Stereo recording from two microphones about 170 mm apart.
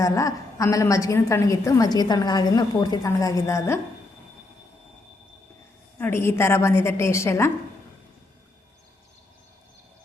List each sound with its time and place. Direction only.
0.0 s a woman's voice: 20° left (ahead or behind)
6.0 s a woman's voice: 15° left (ahead or behind)